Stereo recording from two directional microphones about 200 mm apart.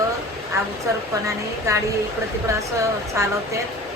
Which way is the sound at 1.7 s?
15° right (ahead or behind).